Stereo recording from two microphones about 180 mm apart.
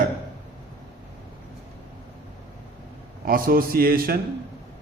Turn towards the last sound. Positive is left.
turn(degrees=-55)  # may be behind; listen again after turning